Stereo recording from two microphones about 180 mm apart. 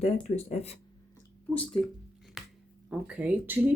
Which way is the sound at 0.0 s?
35° left (ahead or behind).